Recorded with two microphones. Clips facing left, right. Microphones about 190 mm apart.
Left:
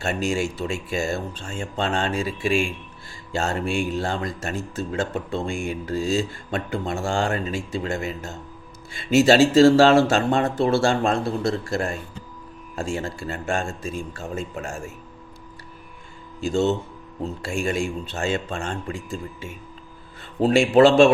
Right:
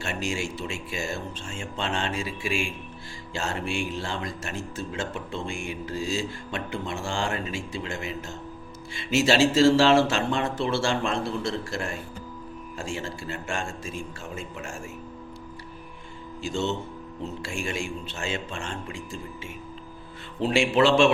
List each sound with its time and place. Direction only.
0.0 s speech: 40° left (ahead or behind)
16.4 s speech: 40° left (ahead or behind)
20.4 s speech: 40° left (ahead or behind)